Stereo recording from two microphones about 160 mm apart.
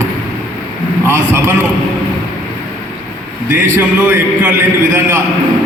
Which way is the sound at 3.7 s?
15° right (ahead or behind).